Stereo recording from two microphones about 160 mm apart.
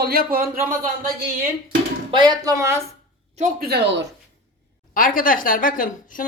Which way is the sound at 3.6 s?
85° right.